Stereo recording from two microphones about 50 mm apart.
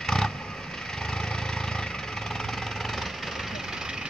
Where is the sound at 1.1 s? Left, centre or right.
Centre.